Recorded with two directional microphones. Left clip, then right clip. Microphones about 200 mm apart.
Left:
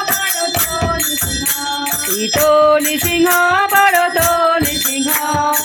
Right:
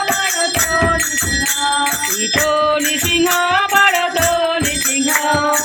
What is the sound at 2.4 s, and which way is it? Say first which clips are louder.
Music: left 5 dB; 35° left (ahead or behind).